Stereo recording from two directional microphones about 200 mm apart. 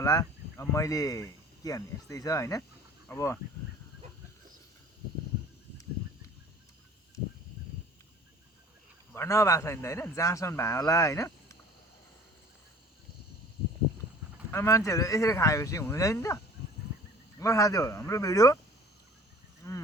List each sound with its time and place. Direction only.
0.0 s a man's voice: 15° left (ahead or behind)
9.1 s a man's voice: 15° left (ahead or behind)
14.5 s a man's voice: 15° left (ahead or behind)
17.4 s a man's voice: 15° left (ahead or behind)
19.6 s a sound: 15° left (ahead or behind)